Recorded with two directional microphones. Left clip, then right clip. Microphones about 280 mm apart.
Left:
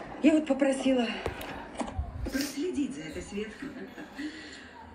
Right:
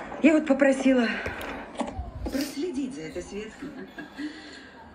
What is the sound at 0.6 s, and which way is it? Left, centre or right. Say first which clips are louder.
Speech: right 5 dB; right.